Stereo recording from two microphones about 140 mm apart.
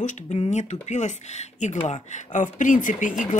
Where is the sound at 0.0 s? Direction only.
55° left (ahead or behind).